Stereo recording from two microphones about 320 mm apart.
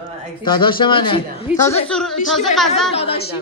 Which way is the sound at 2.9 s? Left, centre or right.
Centre.